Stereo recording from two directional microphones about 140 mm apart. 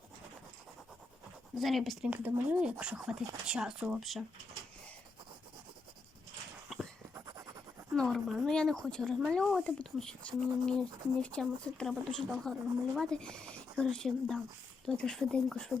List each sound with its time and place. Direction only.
1.5 s speech: centre (ahead or behind)
2.2 s speech: 15° right (ahead or behind)
6.7 s a sound: centre (ahead or behind)
7.1 s writing: 20° right (ahead or behind)
7.9 s speech: 5° left (ahead or behind)